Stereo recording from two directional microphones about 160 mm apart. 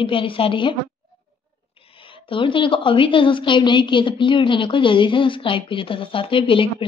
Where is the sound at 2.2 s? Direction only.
35° left (ahead or behind).